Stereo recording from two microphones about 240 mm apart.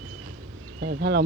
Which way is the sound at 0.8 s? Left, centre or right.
Right.